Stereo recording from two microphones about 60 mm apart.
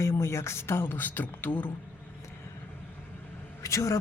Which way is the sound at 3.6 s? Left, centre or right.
Left.